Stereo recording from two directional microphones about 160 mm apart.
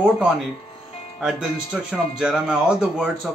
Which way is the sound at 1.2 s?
5° right (ahead or behind).